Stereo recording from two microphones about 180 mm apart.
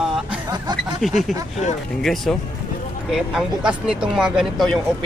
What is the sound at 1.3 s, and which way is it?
Speech, centre (ahead or behind).